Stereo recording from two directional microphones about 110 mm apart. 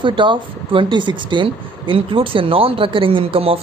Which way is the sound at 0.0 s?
50° right (ahead or behind).